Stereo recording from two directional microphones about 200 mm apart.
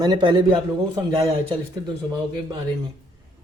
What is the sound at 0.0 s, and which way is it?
Speech, 20° right (ahead or behind).